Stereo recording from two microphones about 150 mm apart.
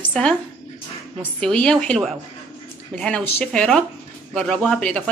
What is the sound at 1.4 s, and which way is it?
A woman's voice, 5° left (ahead or behind).